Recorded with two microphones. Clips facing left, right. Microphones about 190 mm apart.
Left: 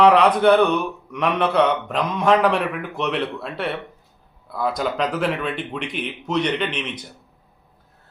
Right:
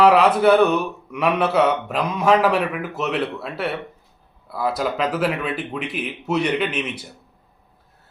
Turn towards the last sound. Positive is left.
turn(degrees=-10)  # may be behind; listen again after turning